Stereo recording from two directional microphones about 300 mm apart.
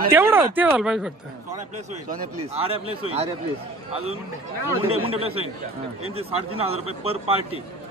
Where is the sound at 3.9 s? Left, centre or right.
Centre.